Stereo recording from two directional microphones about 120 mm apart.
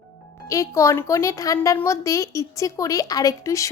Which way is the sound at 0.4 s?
25° left (ahead or behind).